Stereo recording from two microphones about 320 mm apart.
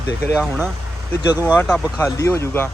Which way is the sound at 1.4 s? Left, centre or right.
Centre.